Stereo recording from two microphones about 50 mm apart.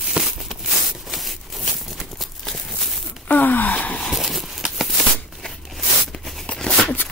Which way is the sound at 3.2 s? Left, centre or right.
Left.